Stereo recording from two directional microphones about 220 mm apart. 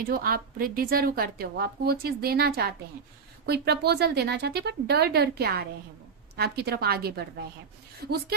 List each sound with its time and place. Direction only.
0.0 s a woman's voice: 40° right (ahead or behind)